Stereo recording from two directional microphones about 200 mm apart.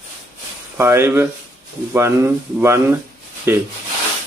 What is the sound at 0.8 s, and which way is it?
Speech, 10° right (ahead or behind).